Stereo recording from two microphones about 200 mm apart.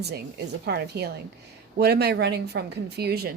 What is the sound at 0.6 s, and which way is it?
A woman's voice, 55° right (ahead or behind).